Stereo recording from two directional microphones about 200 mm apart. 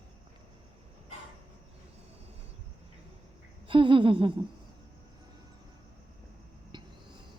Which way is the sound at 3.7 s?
25° right (ahead or behind).